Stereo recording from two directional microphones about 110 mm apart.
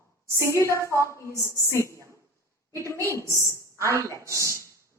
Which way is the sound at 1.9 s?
25° right (ahead or behind).